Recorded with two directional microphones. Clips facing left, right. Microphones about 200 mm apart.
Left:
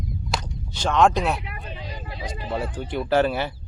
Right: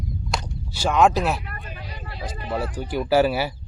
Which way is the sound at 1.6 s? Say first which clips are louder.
Left 2 dB; 25° left (ahead or behind).